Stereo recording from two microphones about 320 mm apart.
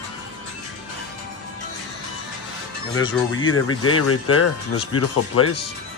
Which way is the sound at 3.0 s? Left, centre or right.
Left.